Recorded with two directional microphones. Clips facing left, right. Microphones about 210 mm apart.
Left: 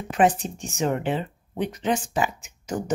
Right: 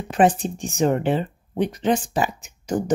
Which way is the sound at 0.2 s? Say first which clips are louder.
Right 3 dB; 35° right (ahead or behind).